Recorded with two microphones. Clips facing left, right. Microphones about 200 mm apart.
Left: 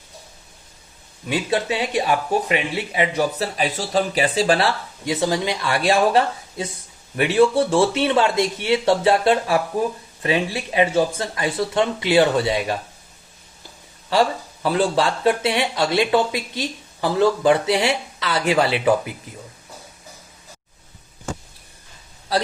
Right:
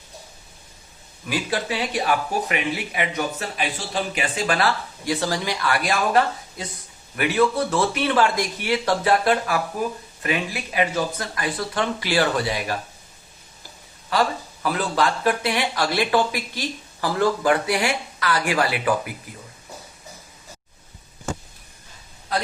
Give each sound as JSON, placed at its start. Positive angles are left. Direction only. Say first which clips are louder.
{"t": 1.3, "sound": "speech", "louder": "left 4 dB", "side_deg": 25}
{"t": 14.1, "sound": "speech", "louder": "left 3 dB", "side_deg": 30}